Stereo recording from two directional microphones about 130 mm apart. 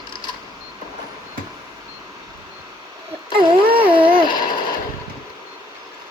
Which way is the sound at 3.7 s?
45° right (ahead or behind).